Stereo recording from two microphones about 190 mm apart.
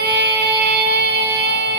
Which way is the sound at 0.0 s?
60° right (ahead or behind).